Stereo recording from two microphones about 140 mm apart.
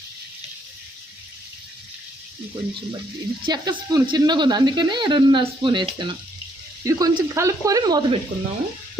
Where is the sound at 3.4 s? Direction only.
30° right (ahead or behind).